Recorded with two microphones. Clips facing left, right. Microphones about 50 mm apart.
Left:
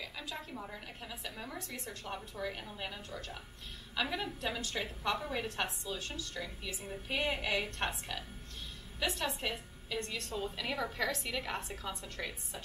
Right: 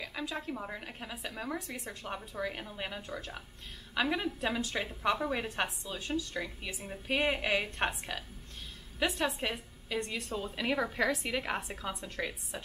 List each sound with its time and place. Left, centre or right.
0.0 s a woman's voice: centre